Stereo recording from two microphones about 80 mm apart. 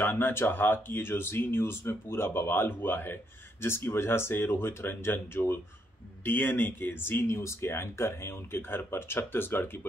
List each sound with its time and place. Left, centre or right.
0.0 s speech: left